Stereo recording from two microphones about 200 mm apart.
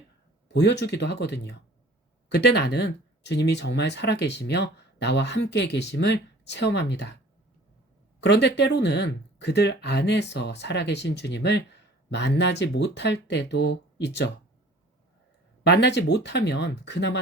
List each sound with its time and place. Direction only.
0.4 s speech: 60° left (ahead or behind)
8.2 s speech: 60° left (ahead or behind)
15.6 s speech: 55° left (ahead or behind)